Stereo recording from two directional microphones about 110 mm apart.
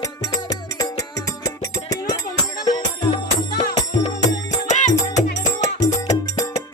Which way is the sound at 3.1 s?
50° left (ahead or behind).